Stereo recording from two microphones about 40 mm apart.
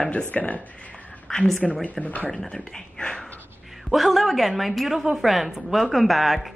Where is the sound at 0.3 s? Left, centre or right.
Left.